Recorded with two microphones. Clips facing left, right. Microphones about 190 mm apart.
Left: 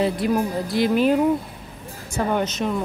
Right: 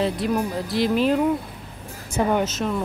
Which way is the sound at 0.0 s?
Centre (ahead or behind).